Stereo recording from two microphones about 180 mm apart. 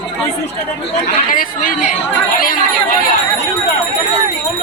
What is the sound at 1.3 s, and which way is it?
Speech, 50° left (ahead or behind).